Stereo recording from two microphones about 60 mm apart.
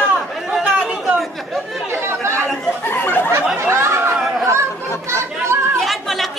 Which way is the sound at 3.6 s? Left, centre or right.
Right.